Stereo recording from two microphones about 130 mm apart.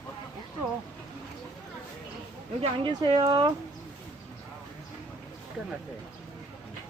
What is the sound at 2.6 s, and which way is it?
Speech, 40° right (ahead or behind).